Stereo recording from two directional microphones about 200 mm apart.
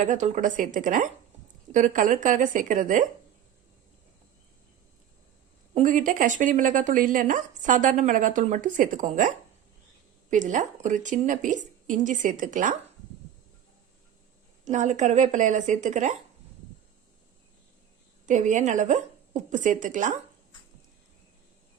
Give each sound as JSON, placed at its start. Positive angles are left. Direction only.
{"t": 0.0, "sound": "speech", "side_deg": -35}
{"t": 5.7, "sound": "speech", "side_deg": -40}
{"t": 14.6, "sound": "speech", "side_deg": -35}
{"t": 18.3, "sound": "speech", "side_deg": -40}